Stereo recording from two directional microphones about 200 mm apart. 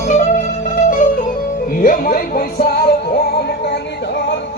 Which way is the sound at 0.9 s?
40° left (ahead or behind).